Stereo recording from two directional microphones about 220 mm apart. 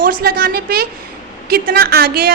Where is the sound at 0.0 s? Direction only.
40° right (ahead or behind).